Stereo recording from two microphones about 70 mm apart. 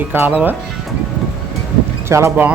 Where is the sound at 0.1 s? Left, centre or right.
Right.